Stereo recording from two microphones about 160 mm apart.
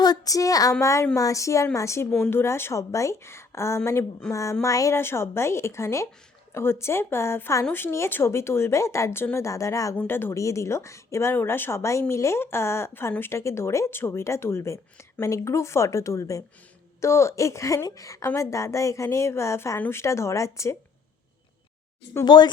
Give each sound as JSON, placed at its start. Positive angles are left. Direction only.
{"t": 0.0, "sound": "a woman's voice", "side_deg": 25}
{"t": 2.1, "sound": "speech", "side_deg": 5}
{"t": 2.4, "sound": "a woman's voice", "side_deg": 15}
{"t": 22.2, "sound": "a woman's voice", "side_deg": 25}